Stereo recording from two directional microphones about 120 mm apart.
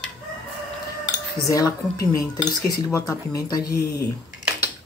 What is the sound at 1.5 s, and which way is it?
Speech, 30° left (ahead or behind).